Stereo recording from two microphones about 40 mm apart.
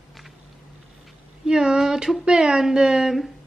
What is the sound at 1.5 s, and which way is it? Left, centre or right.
A woman's voice, centre.